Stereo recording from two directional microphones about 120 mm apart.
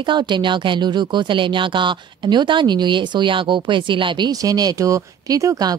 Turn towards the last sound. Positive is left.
turn(degrees=-30)  # may be behind; listen again after turning